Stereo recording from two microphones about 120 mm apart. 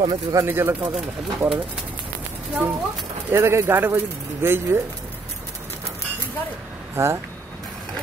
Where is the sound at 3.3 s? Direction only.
20° right (ahead or behind).